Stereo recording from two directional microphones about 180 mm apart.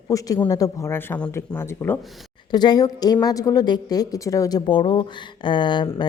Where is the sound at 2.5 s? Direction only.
25° left (ahead or behind).